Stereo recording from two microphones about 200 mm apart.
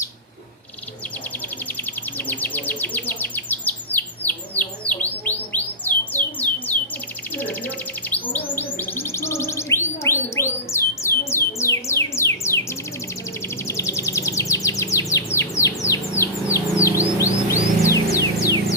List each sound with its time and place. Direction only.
2.1 s chirp: 10° left (ahead or behind)
8.1 s chirp tone: 10° left (ahead or behind)
13.7 s chirp: 15° left (ahead or behind)
17.2 s music: 15° left (ahead or behind)